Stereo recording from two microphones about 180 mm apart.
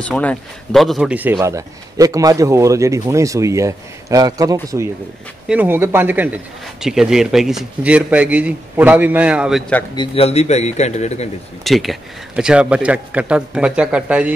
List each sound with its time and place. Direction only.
0.0 s speech: 5° left (ahead or behind)
1.4 s speech: 20° right (ahead or behind)
9.9 s a man's voice: 35° left (ahead or behind)
11.6 s speech: centre (ahead or behind)